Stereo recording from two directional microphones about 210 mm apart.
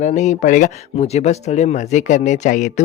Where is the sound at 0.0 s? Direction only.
35° left (ahead or behind).